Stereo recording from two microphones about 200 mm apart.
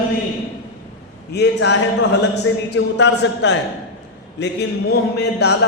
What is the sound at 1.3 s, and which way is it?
Speech, 60° left (ahead or behind).